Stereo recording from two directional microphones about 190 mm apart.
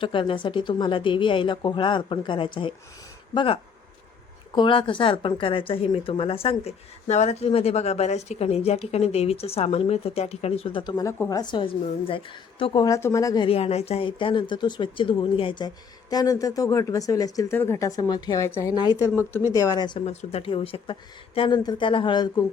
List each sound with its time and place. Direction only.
0.0 s speech: 25° left (ahead or behind)
20.1 s speech: 30° left (ahead or behind)